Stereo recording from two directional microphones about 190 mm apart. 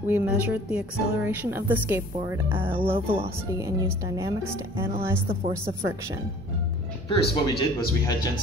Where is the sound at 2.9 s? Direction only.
30° right (ahead or behind).